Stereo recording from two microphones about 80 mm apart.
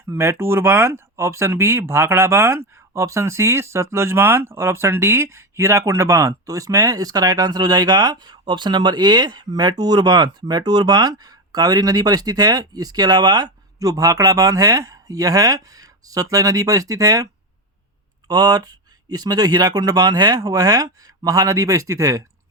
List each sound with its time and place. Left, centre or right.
0.0 s speech: right
18.3 s speech: right